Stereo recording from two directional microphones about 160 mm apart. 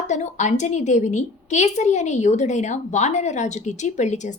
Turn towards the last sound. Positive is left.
turn(degrees=45)  # may be behind; listen again after turning